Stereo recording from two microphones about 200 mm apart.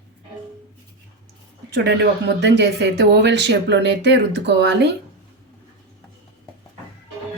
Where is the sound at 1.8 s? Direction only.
60° right (ahead or behind).